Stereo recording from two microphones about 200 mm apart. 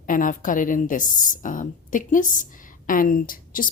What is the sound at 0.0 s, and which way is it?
A woman's voice, 40° left (ahead or behind).